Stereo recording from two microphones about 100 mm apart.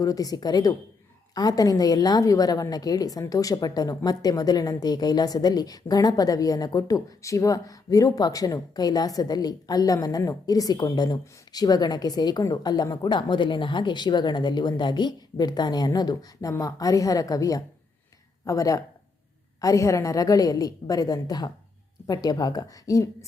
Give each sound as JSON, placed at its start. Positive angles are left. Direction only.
{"t": 0.0, "sound": "a woman's voice", "side_deg": 35}